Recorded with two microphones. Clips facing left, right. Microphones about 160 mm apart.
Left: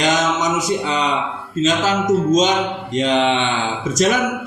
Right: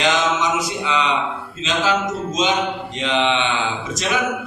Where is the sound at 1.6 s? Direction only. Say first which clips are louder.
Left 3 dB; 45° left (ahead or behind).